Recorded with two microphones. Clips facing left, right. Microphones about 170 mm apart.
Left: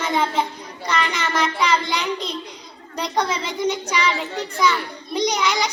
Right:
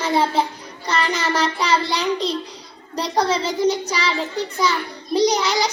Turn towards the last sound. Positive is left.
turn(degrees=-35)  # may be behind; listen again after turning